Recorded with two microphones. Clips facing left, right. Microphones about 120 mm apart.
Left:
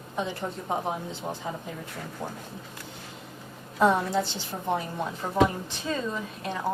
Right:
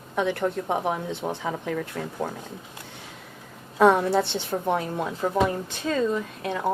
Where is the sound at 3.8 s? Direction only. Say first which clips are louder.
Right 4 dB; 65° right (ahead or behind).